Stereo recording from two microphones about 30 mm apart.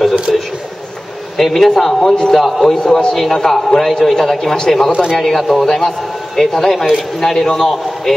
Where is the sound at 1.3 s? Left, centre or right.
Centre.